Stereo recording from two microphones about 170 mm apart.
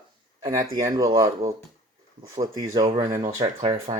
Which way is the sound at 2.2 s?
20° right (ahead or behind).